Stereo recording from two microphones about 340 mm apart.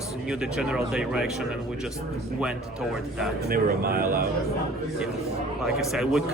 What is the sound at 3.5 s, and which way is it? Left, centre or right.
Speech, right.